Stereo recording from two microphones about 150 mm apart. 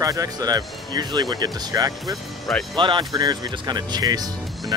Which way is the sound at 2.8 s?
30° right (ahead or behind).